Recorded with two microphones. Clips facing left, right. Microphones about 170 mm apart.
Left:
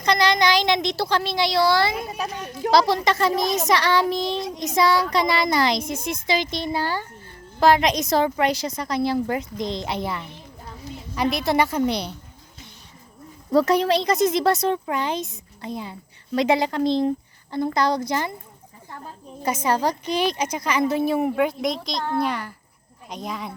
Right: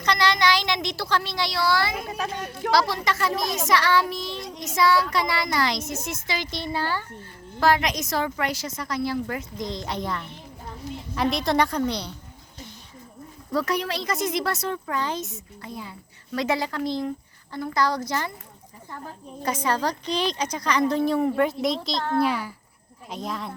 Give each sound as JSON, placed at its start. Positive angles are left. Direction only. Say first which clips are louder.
{"t": 0.1, "sound": "a woman's voice", "louder": "left 3 dB", "side_deg": 15}
{"t": 4.1, "sound": "child singing", "louder": "left 8 dB", "side_deg": 90}
{"t": 4.8, "sound": "a woman's voice", "louder": "left 2 dB", "side_deg": 20}
{"t": 9.8, "sound": "speech", "louder": "left 2 dB", "side_deg": 10}
{"t": 13.5, "sound": "a woman's voice", "louder": "left 8 dB", "side_deg": 25}
{"t": 19.6, "sound": "speech", "louder": "left 4 dB", "side_deg": 15}